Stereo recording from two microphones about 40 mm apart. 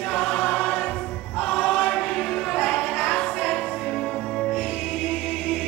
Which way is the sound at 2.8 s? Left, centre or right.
Left.